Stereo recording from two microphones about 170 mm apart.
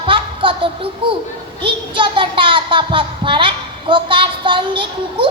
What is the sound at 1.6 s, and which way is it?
A child's voice, 30° right (ahead or behind).